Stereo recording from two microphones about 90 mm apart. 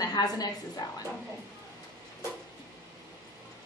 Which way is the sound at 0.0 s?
45° left (ahead or behind).